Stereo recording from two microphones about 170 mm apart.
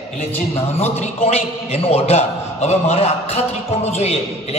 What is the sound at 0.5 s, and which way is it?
A man's voice, 35° left (ahead or behind).